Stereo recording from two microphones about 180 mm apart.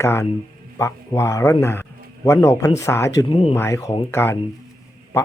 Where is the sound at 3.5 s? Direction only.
15° left (ahead or behind).